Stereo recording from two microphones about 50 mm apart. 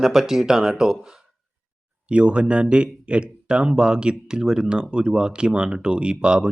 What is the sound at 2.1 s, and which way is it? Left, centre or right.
Speech, right.